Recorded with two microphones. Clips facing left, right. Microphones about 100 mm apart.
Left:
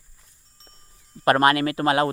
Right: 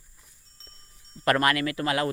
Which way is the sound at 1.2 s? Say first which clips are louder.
Left 5 dB; 30° left (ahead or behind).